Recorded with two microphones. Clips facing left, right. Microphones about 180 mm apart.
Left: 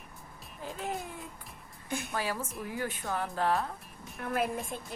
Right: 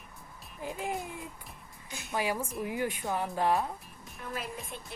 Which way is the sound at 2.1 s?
15° right (ahead or behind).